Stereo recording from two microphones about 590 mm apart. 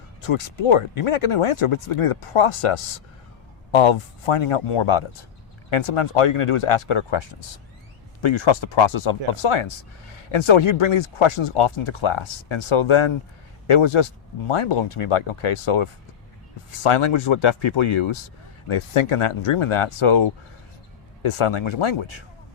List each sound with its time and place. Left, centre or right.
0.3 s speech: left